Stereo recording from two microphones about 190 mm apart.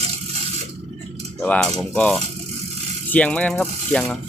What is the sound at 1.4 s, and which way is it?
Speech, 5° left (ahead or behind).